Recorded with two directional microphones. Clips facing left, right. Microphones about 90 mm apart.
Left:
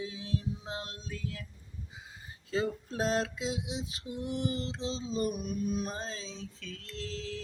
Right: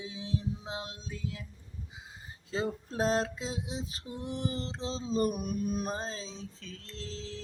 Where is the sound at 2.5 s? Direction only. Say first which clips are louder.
Left 1 dB; 30° right (ahead or behind).